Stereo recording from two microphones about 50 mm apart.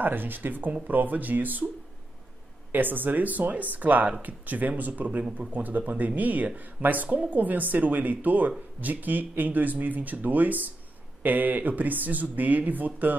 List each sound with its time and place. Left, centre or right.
0.0 s speech: right
2.7 s speech: right